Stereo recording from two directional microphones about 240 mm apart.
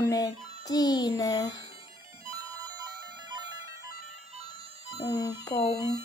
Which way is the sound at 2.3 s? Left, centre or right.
Centre.